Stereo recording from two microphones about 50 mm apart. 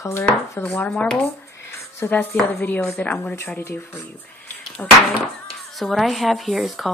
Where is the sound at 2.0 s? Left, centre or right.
Left.